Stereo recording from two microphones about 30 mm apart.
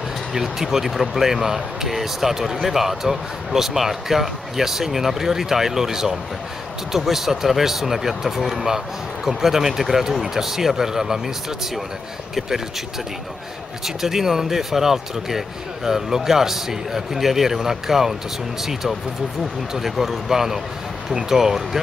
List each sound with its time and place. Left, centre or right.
0.3 s speech: centre
13.8 s speech: centre